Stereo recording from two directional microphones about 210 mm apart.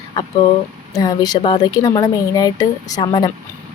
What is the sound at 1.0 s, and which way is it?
Speech, 20° left (ahead or behind).